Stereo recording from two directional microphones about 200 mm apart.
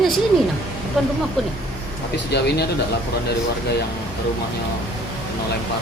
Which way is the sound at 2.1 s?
55° left (ahead or behind).